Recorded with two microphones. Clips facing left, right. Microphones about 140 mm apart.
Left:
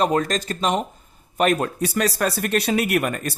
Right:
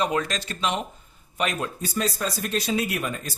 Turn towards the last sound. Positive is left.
turn(degrees=65)  # may be behind; listen again after turning